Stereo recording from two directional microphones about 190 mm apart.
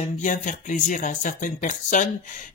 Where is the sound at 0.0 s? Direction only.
40° left (ahead or behind).